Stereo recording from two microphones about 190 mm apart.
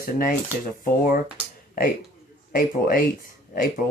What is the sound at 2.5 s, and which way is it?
Speech, 50° left (ahead or behind).